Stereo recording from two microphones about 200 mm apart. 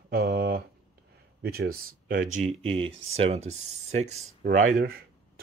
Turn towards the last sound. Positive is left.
turn(degrees=-45)  # may be behind; listen again after turning